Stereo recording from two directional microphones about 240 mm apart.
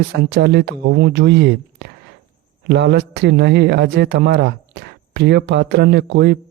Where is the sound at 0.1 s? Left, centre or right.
Right.